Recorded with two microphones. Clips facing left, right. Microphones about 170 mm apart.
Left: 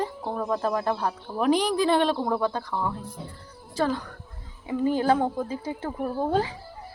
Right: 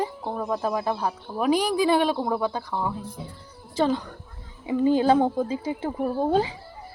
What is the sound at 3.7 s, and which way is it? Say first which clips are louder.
Speech: right 3 dB; 20° right (ahead or behind).